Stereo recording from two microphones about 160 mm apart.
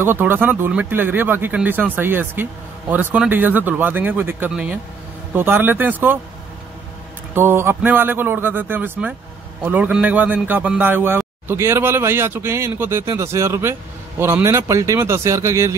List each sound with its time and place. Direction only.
0.0 s a man's voice: 15° right (ahead or behind)
7.3 s a man's voice: 15° right (ahead or behind)